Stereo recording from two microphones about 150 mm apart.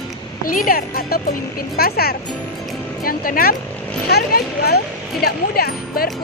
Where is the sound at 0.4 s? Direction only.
70° left (ahead or behind); by 2.1 s 90° left.